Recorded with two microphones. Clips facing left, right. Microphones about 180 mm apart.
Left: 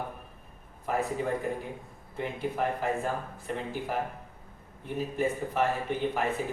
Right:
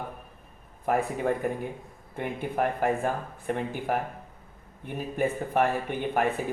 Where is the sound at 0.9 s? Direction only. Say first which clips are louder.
Right 4 dB; 55° right (ahead or behind).